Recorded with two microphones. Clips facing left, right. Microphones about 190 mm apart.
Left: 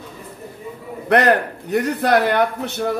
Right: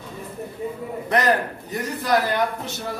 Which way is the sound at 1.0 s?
65° left (ahead or behind).